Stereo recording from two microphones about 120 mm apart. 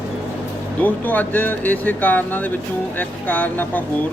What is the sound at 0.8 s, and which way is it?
Speech, 15° left (ahead or behind).